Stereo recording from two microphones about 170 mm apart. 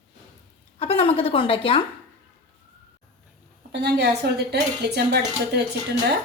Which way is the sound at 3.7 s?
80° right.